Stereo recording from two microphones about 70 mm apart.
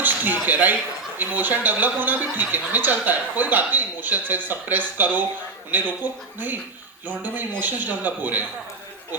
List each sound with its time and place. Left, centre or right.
0.0 s a man's voice: right